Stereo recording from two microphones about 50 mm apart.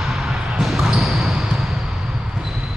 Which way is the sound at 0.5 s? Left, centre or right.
Centre.